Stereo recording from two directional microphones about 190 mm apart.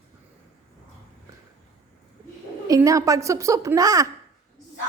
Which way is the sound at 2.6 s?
15° right (ahead or behind).